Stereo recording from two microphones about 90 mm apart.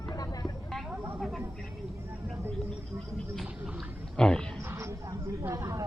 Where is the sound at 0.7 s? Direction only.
Centre (ahead or behind).